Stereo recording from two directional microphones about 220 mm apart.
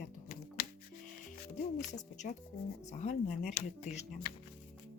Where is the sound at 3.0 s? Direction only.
35° left (ahead or behind).